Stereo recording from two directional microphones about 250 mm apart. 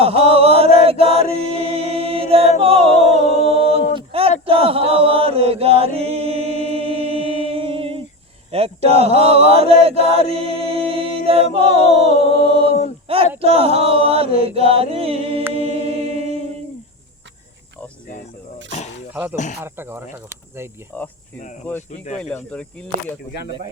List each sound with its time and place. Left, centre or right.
0.0 s chant: right
3.2 s a capella: left
3.7 s chant: right
10.2 s a capella: right
13.1 s a sound: right
13.4 s chant: right
15.5 s a capella: right
19.1 s speech: centre
20.9 s speech: centre
21.8 s speech: left
22.2 s speech: centre